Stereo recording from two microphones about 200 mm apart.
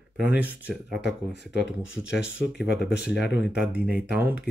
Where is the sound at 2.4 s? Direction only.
5° right (ahead or behind).